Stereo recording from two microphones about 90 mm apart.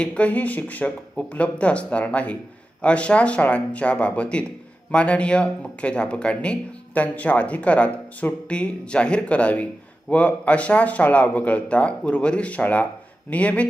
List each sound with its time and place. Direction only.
0.0 s speech: 15° left (ahead or behind)